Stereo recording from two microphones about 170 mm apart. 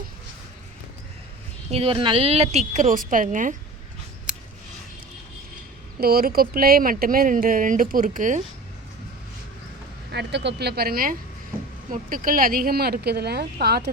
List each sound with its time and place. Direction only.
1.7 s a woman's voice: 35° right (ahead or behind); by 3.5 s 50° right (ahead or behind)
6.0 s speech: 65° right (ahead or behind)
10.1 s speech: 90° right; by 13.9 s 70° right (ahead or behind)